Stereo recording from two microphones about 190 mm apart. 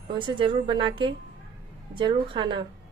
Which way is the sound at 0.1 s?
25° right (ahead or behind).